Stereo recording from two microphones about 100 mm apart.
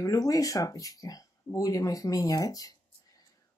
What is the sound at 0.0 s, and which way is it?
Speech, 35° left (ahead or behind).